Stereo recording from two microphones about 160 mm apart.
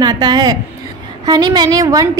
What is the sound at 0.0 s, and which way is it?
A woman's voice, 25° right (ahead or behind).